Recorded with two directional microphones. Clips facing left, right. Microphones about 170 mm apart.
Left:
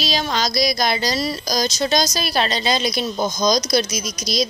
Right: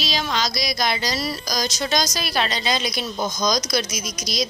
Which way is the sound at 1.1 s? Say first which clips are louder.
Left 4 dB; 25° left (ahead or behind).